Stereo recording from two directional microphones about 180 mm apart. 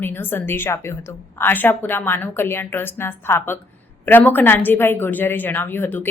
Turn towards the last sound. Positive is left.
turn(degrees=10)  # may be behind; listen again after turning